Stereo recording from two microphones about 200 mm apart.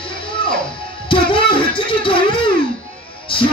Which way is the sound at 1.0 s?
25° left (ahead or behind).